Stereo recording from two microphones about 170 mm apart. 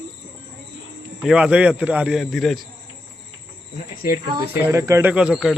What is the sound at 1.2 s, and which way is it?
Speech, 5° right (ahead or behind).